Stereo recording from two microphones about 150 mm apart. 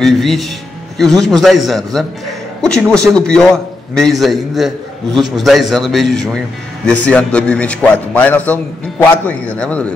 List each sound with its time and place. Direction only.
0.0 s a man's voice: centre (ahead or behind)